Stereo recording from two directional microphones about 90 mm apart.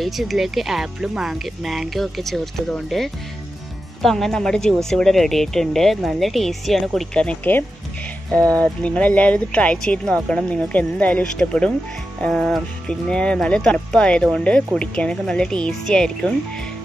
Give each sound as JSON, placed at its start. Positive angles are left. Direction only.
{"t": 0.0, "sound": "a woman's voice", "side_deg": 0}
{"t": 7.2, "sound": "speech", "side_deg": 20}